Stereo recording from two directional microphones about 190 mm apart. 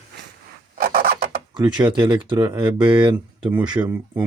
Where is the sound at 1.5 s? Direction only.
25° right (ahead or behind).